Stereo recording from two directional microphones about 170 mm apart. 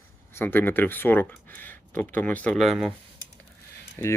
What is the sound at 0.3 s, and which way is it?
Speech, 10° left (ahead or behind).